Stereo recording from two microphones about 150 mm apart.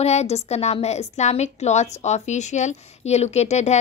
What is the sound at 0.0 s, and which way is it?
A woman's voice, 45° left (ahead or behind).